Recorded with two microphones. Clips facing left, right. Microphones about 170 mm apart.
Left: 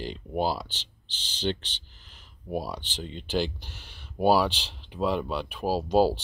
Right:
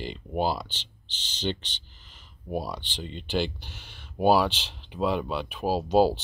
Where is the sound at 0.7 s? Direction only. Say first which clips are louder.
Right 1 dB; 40° left (ahead or behind).